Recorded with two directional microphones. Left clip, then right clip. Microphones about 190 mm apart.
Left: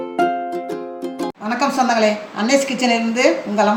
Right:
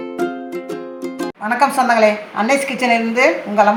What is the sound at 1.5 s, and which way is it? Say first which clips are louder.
A woman's voice: right 4 dB; 10° right (ahead or behind).